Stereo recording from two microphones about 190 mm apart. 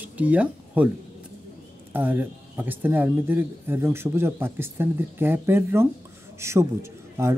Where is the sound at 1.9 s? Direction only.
10° right (ahead or behind).